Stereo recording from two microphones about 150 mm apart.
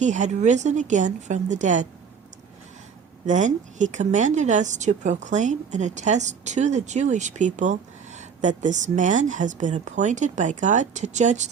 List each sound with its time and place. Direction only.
0.0 s speech: 55° right (ahead or behind)
3.2 s speech: 55° right (ahead or behind)